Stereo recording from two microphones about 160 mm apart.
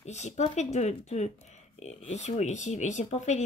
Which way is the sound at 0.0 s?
45° left (ahead or behind).